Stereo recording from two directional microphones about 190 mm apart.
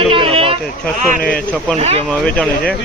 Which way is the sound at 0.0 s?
30° right (ahead or behind).